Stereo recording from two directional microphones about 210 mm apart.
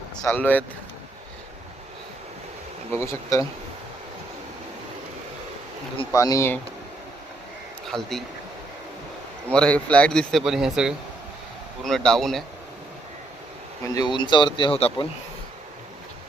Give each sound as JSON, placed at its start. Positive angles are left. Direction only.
{"t": 0.2, "sound": "speech", "side_deg": 10}
{"t": 2.9, "sound": "speech", "side_deg": 10}
{"t": 6.1, "sound": "speech", "side_deg": 15}
{"t": 7.9, "sound": "speech", "side_deg": 0}
{"t": 9.5, "sound": "speech", "side_deg": 5}
{"t": 13.9, "sound": "speech", "side_deg": 20}